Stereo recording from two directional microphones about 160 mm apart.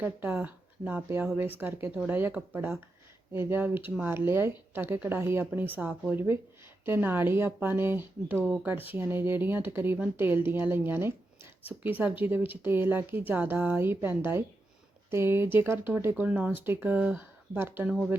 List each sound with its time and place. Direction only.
0.0 s speech: 10° right (ahead or behind)